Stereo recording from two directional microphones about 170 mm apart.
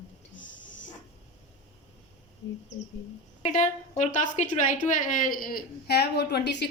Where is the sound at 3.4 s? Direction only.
45° left (ahead or behind).